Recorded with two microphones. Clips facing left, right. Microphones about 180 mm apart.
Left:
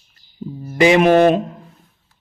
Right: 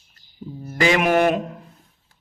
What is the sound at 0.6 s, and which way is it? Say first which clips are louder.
Speech: left 7 dB; 20° left (ahead or behind).